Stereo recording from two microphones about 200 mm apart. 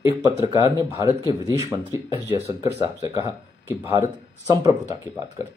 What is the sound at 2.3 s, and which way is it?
Speech, 30° left (ahead or behind).